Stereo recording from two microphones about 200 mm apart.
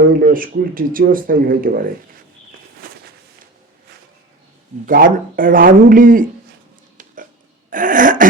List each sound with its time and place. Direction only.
0.1 s speech: 45° right (ahead or behind)
4.9 s speech: 45° right (ahead or behind)
7.7 s throat clearing: 40° right (ahead or behind)